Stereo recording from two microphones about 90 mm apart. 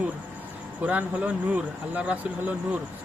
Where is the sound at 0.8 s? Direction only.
15° right (ahead or behind).